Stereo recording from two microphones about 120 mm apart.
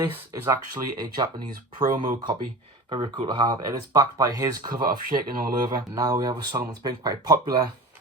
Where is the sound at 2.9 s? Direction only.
45° right (ahead or behind).